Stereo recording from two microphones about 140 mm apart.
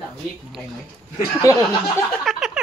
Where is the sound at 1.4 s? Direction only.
20° left (ahead or behind).